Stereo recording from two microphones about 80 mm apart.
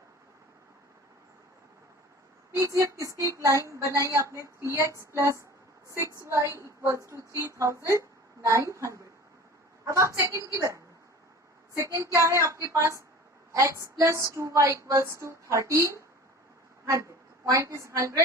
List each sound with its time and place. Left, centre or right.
2.5 s a woman's voice: right
12.1 s a woman's voice: right